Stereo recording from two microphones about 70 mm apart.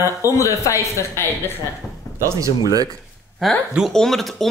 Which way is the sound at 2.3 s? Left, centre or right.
Right.